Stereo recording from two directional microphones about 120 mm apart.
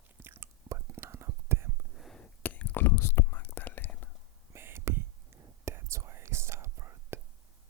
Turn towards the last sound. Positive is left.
turn(degrees=-25)  # may be behind; listen again after turning